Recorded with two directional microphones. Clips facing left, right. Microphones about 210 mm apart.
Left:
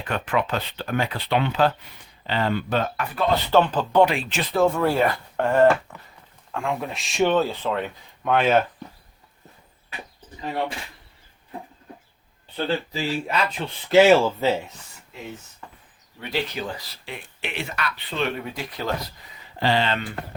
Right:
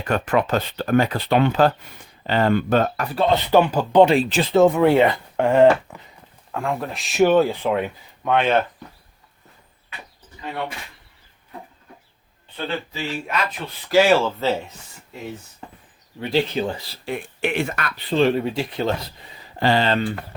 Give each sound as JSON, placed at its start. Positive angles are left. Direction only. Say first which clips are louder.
{"t": 0.0, "sound": "speech", "louder": "right 4 dB", "side_deg": -45}
{"t": 3.5, "sound": "speech", "louder": "right 3 dB", "side_deg": -10}
{"t": 4.0, "sound": "speech", "louder": "right 5 dB", "side_deg": -35}
{"t": 6.5, "sound": "speech", "louder": "right 2 dB", "side_deg": 0}
{"t": 8.2, "sound": "speech", "louder": "right 1 dB", "side_deg": 0}
{"t": 12.5, "sound": "speech", "louder": "left 2 dB", "side_deg": 35}
{"t": 13.9, "sound": "speech", "louder": "left 1 dB", "side_deg": 20}
{"t": 16.2, "sound": "speech", "louder": "right 7 dB", "side_deg": -30}
{"t": 17.1, "sound": "speech", "louder": "right 10 dB", "side_deg": -50}
{"t": 18.1, "sound": "speech", "louder": "right 11 dB", "side_deg": -35}
{"t": 19.5, "sound": "speech", "louder": "right 4 dB", "side_deg": -45}